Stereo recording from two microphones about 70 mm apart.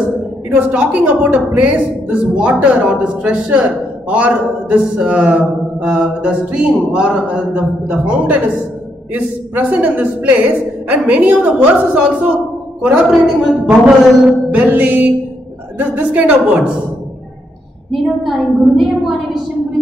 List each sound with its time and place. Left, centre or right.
0.5 s a woman's voice: right
14.5 s a woman's voice: right
18.2 s a woman's voice: centre